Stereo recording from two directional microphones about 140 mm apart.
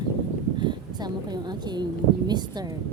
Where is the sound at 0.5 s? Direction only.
35° right (ahead or behind).